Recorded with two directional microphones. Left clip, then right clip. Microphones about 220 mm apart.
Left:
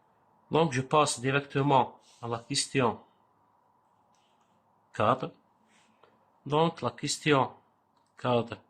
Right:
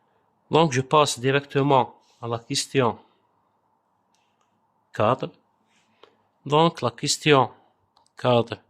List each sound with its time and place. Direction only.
0.5 s speech: 50° right (ahead or behind)
4.9 s speech: 45° right (ahead or behind)